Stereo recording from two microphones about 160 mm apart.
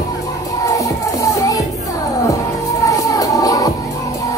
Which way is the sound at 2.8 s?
20° left (ahead or behind).